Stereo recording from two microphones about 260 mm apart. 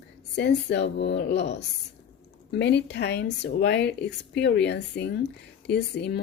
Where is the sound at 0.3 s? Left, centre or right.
Left.